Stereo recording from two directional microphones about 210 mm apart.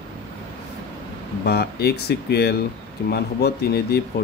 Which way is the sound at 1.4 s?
50° left (ahead or behind).